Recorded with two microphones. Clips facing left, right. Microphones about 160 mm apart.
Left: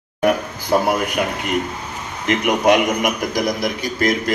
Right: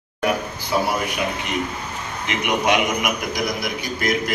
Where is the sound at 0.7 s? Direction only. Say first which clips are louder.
Left 4 dB; 55° left (ahead or behind).